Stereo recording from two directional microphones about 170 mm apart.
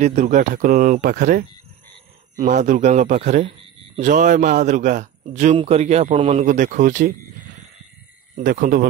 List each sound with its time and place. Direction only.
0.0 s a man's voice: 45° right (ahead or behind)
8.4 s speech: 55° right (ahead or behind)